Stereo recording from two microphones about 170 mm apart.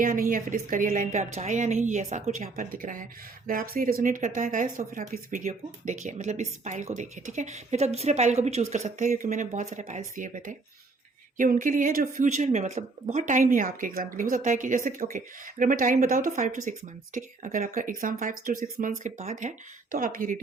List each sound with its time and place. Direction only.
0.0 s speech: 55° right (ahead or behind)